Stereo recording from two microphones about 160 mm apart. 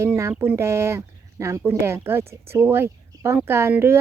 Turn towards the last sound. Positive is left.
turn(degrees=-15)  # may be behind; listen again after turning